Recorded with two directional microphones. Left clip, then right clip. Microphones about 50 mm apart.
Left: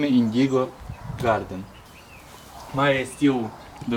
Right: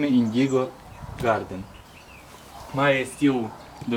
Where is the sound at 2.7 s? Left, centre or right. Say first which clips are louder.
Even; centre.